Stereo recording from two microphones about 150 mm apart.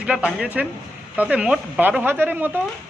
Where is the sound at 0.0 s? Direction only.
5° right (ahead or behind).